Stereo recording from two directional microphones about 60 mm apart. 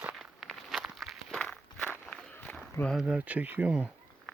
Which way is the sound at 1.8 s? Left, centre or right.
Left.